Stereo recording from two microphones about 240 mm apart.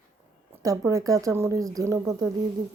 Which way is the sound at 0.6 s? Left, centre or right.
Centre.